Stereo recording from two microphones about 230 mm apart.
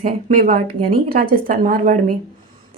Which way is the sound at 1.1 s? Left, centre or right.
Right.